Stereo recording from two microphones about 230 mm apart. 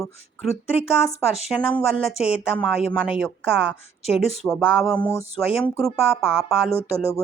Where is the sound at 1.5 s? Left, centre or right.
Centre.